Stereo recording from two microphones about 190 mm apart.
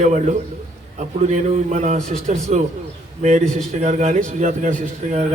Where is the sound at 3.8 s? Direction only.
35° right (ahead or behind).